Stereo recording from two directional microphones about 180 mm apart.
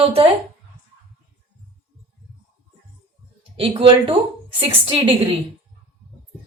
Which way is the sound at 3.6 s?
30° right (ahead or behind).